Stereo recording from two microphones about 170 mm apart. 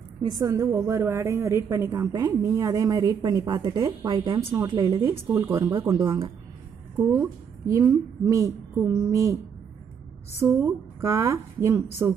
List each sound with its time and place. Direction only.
0.2 s a woman's voice: 20° right (ahead or behind)
10.4 s a woman's voice: 15° right (ahead or behind)